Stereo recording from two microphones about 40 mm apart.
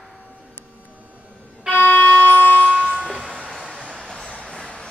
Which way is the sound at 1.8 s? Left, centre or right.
Left.